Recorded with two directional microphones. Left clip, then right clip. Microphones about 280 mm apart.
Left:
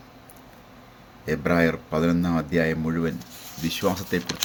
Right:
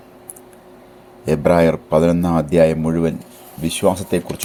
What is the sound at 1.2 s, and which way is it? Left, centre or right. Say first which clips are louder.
Speech: right 8 dB; right.